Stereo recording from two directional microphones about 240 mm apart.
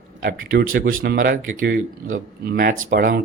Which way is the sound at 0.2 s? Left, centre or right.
Right.